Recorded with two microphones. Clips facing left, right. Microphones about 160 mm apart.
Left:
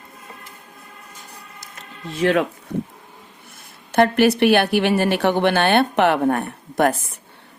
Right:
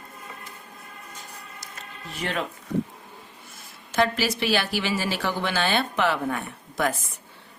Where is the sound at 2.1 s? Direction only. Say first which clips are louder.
Left 11 dB; 85° left.